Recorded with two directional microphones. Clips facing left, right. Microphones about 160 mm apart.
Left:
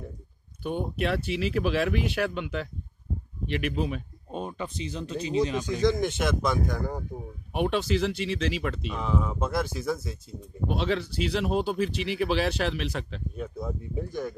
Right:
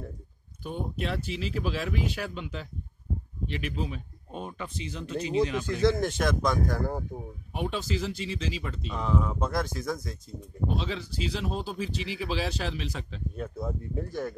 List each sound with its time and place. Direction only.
0.7 s speech: 65° left (ahead or behind)
4.3 s speech: 25° left (ahead or behind)
5.6 s speech: 15° left (ahead or behind)
5.9 s speech: centre (ahead or behind)
7.5 s speech: 70° left (ahead or behind)
8.9 s speech: 5° left (ahead or behind)
10.7 s speech: 65° left (ahead or behind)
13.4 s speech: centre (ahead or behind)